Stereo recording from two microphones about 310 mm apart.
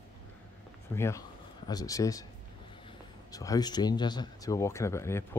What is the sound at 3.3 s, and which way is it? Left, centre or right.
Speech, centre.